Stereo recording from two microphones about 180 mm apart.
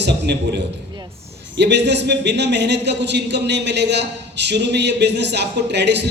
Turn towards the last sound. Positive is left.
turn(degrees=-70)  # may be behind; listen again after turning